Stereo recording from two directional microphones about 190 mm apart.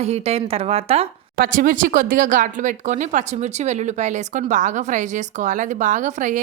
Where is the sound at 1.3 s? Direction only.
50° right (ahead or behind).